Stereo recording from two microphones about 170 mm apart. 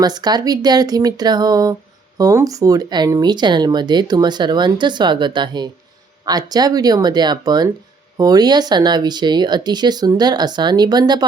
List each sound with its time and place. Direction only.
0.0 s speech: 25° right (ahead or behind)